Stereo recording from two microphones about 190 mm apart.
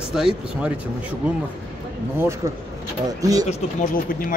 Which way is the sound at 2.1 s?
15° right (ahead or behind).